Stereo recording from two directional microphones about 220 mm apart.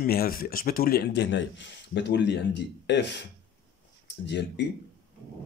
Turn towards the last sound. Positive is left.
turn(degrees=50)  # may be behind; listen again after turning